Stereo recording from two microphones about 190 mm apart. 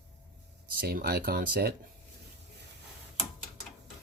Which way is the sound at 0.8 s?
55° right (ahead or behind).